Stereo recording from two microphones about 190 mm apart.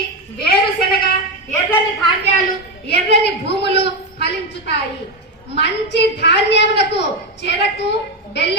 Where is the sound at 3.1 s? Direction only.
60° left (ahead or behind).